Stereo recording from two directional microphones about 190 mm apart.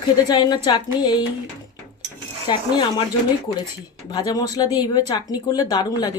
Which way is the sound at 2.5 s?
20° left (ahead or behind).